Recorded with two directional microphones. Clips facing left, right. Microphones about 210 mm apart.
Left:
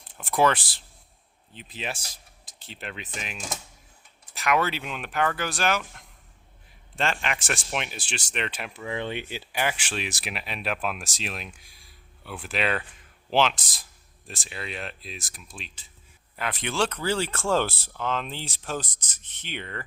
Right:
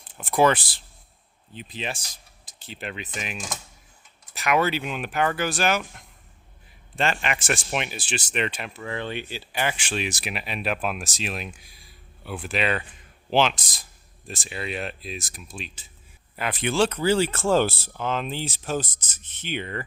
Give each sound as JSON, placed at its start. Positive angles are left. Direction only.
{"t": 0.0, "sound": "speech", "side_deg": 0}
{"t": 4.4, "sound": "speech", "side_deg": 0}
{"t": 6.9, "sound": "speech", "side_deg": -5}
{"t": 8.7, "sound": "speech", "side_deg": 15}